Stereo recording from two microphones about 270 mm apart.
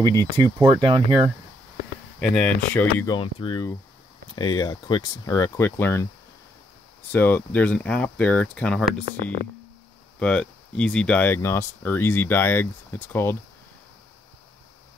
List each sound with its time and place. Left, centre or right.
0.2 s speech: centre
2.1 s speech: centre
7.1 s speech: centre
10.1 s speech: centre